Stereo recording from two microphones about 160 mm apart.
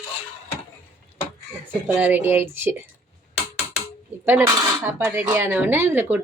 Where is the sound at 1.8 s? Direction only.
10° right (ahead or behind).